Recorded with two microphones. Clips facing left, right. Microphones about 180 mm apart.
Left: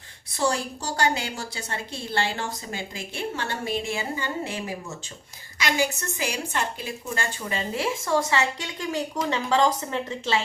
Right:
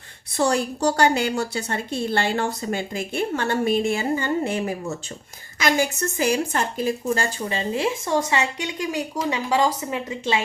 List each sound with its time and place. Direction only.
0.3 s a woman's voice: 65° right (ahead or behind); by 7.6 s 40° right (ahead or behind)
7.7 s a woman's voice: 20° right (ahead or behind)